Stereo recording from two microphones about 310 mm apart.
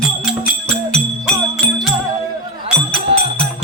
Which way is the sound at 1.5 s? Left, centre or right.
Centre.